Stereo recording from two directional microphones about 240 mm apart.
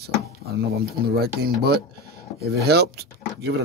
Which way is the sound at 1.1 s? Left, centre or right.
Right.